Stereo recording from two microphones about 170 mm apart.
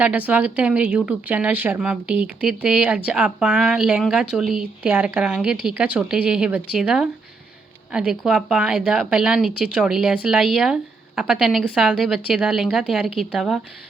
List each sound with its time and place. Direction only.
0.0 s speech: 10° right (ahead or behind)